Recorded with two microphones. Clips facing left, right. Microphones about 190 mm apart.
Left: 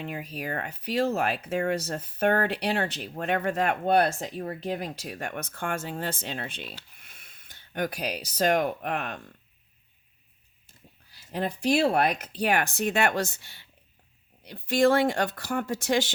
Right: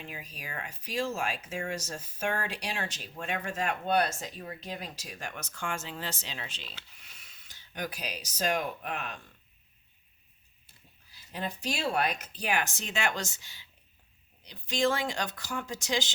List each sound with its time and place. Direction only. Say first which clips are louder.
0.0 s speech: left 10 dB; 55° left (ahead or behind)
11.1 s speech: left 6 dB; 55° left (ahead or behind)